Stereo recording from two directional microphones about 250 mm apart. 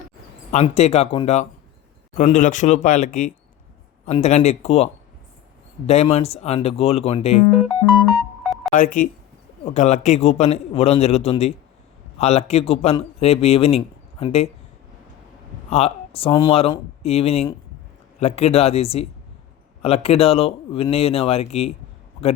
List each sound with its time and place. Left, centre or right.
0.5 s a man's voice: left
8.7 s a man's voice: left
15.7 s a man's voice: left